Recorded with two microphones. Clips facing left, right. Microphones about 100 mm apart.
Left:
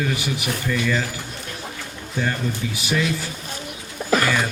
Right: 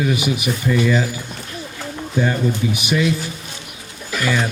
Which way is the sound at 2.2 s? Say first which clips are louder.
Right 6 dB; 20° right (ahead or behind).